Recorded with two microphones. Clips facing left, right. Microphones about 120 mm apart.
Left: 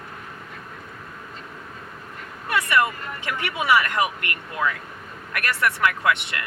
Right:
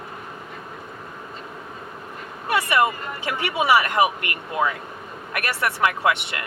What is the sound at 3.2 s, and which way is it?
Speech, 30° right (ahead or behind).